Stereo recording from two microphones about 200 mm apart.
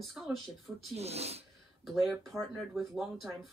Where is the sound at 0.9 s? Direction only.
30° right (ahead or behind).